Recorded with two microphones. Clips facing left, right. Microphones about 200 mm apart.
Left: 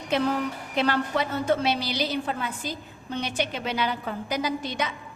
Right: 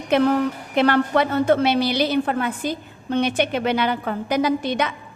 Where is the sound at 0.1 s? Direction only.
60° right (ahead or behind).